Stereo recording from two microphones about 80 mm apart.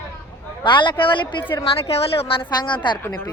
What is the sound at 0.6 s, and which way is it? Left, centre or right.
Speech, left.